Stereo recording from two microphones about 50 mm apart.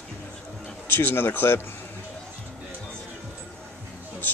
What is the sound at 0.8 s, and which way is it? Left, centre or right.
Speech, left.